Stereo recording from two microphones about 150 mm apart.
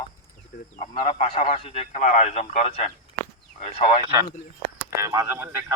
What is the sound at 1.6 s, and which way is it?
Speech, 40° left (ahead or behind).